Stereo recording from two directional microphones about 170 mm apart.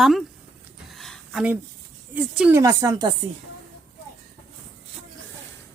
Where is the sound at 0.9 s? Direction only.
Centre (ahead or behind).